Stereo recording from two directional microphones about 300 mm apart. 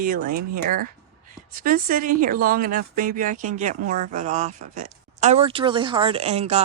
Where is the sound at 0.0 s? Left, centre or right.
Right.